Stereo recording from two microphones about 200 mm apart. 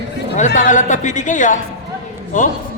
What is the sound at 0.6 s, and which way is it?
Speech, 40° left (ahead or behind).